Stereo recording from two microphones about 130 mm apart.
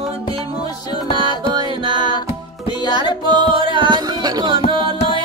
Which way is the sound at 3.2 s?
40° right (ahead or behind).